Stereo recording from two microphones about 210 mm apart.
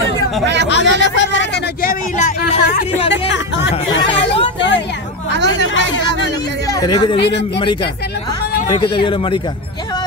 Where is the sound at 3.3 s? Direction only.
55° left (ahead or behind).